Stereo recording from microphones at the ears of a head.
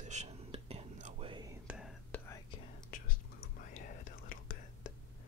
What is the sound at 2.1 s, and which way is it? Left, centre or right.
Whispering, left.